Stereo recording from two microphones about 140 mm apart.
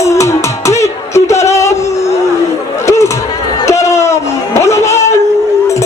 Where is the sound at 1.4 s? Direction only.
20° left (ahead or behind).